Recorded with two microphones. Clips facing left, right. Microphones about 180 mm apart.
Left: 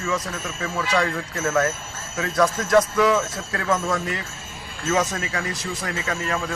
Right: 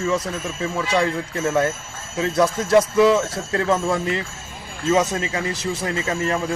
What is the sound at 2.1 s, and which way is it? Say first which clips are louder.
Speech: right 2 dB; 30° right (ahead or behind).